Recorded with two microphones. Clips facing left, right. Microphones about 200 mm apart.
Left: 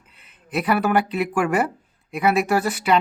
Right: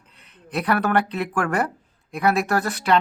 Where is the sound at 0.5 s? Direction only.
5° left (ahead or behind).